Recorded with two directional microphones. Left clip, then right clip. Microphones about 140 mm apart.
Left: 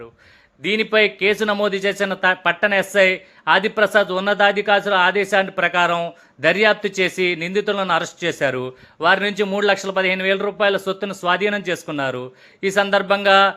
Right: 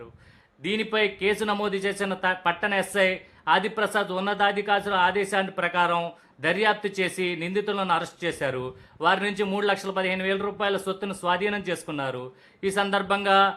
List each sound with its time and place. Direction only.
0.6 s speech: 25° left (ahead or behind)